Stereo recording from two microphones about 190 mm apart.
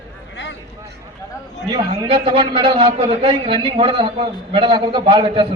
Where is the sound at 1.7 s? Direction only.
25° right (ahead or behind).